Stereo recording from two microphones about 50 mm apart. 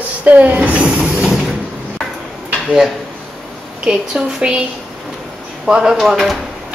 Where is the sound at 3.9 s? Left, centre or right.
Centre.